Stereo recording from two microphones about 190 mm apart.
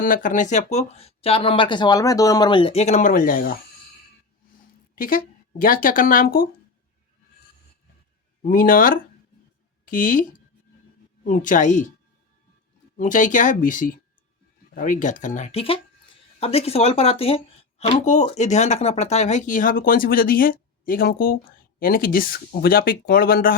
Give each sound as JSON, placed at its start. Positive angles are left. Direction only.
{"t": 0.0, "sound": "speech", "side_deg": 45}
{"t": 4.9, "sound": "speech", "side_deg": 50}
{"t": 8.4, "sound": "speech", "side_deg": 45}
{"t": 13.0, "sound": "speech", "side_deg": 40}